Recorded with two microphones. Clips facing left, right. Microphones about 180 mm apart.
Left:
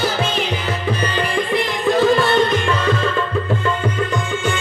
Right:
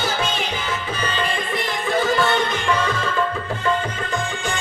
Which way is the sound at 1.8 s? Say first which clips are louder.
Left 5 dB; 60° left (ahead or behind).